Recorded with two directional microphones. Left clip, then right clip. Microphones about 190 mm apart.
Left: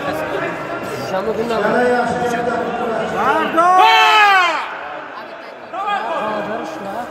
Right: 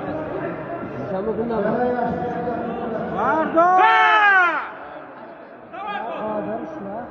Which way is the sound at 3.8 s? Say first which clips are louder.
Left 6 dB; 15° left (ahead or behind).